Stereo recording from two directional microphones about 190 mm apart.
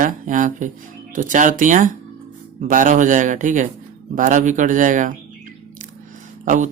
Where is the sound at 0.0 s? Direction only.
45° right (ahead or behind).